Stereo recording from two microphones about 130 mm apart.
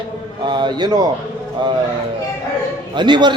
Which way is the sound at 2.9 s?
35° right (ahead or behind).